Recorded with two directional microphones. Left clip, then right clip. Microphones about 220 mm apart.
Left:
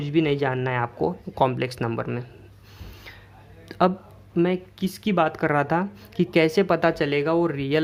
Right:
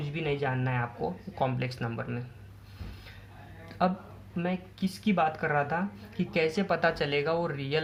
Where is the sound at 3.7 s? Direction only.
45° left (ahead or behind).